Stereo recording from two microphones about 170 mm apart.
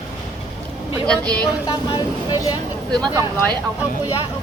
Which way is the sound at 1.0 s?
5° left (ahead or behind).